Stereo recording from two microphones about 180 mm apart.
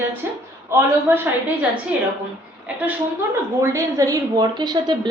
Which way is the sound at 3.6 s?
15° right (ahead or behind).